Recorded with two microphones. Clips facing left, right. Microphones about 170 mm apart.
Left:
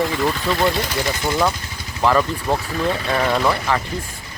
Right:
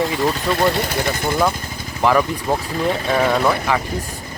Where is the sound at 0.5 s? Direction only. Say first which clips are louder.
Right 1 dB; 55° right (ahead or behind).